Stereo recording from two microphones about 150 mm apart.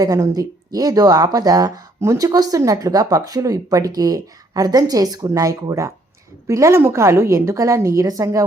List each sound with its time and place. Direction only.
0.0 s speech: 25° right (ahead or behind)